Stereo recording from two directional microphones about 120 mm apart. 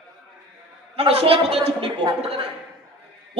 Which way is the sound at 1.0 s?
55° right (ahead or behind).